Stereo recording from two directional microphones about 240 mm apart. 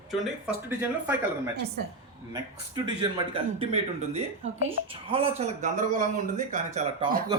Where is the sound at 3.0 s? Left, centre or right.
Right.